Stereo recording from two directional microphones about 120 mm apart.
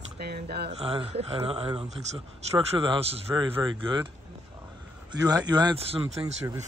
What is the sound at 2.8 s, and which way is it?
Speech, 45° right (ahead or behind).